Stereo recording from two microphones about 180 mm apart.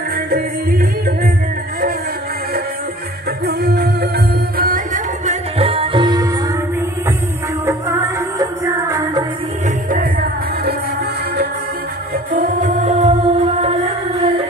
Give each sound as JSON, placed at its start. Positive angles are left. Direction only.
{"t": 0.3, "sound": "music", "side_deg": -55}
{"t": 3.4, "sound": "music", "side_deg": -60}
{"t": 4.6, "sound": "music", "side_deg": -50}
{"t": 7.6, "sound": "music", "side_deg": -15}
{"t": 12.3, "sound": "music", "side_deg": -45}